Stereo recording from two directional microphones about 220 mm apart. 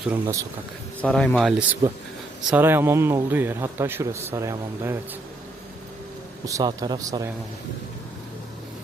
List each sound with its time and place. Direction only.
0.0 s a man's voice: 10° right (ahead or behind)
1.0 s a man's voice: 5° left (ahead or behind); by 4.9 s 10° right (ahead or behind)
6.4 s a man's voice: 15° right (ahead or behind)